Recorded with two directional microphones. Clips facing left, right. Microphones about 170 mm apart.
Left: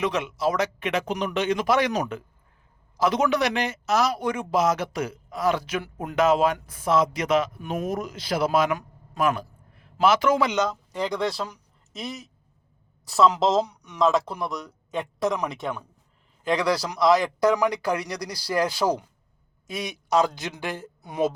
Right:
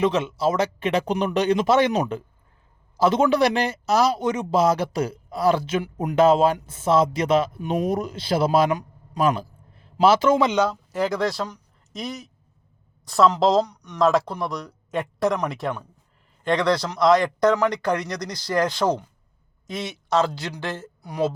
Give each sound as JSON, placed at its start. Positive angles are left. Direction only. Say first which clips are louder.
{"t": 0.0, "sound": "speech", "louder": "right 4 dB", "side_deg": -30}
{"t": 1.5, "sound": "a man's voice", "louder": "right 3 dB", "side_deg": -25}
{"t": 6.1, "sound": "a man's voice", "louder": "right 4 dB", "side_deg": -30}
{"t": 10.6, "sound": "speech", "louder": "right 4 dB", "side_deg": -5}